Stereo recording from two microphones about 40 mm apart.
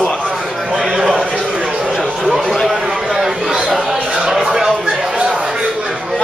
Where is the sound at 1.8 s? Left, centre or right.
Centre.